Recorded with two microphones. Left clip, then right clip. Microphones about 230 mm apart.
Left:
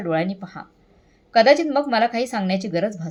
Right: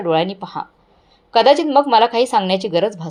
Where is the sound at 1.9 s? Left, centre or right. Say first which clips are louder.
Right 6 dB; centre.